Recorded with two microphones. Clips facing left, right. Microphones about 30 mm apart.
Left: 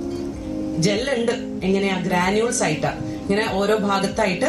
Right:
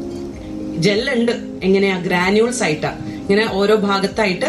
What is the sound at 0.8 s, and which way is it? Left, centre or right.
A man's voice, right.